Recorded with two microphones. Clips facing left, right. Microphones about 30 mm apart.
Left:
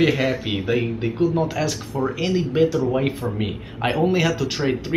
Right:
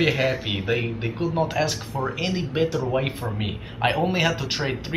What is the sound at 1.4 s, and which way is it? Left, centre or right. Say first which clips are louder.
Speech: even; right.